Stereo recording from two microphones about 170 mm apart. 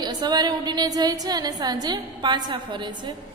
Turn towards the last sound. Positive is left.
turn(degrees=-25)  # may be behind; listen again after turning